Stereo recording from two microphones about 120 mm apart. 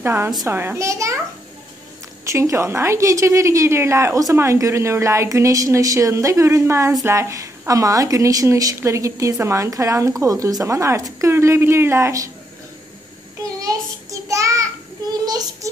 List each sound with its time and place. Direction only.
0.0 s a woman's voice: 20° right (ahead or behind)
2.2 s a woman's voice: 25° right (ahead or behind)
14.2 s child singing: 25° right (ahead or behind)